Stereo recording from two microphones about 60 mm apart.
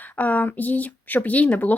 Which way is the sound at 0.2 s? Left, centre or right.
Left.